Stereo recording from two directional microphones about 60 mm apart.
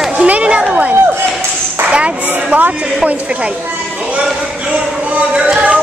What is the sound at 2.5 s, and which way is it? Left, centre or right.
Speech, right.